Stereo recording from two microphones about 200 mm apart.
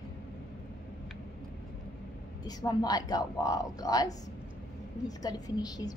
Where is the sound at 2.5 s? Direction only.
20° left (ahead or behind).